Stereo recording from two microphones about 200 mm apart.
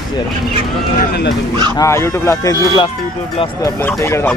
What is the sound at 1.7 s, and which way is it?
Speech, 15° left (ahead or behind).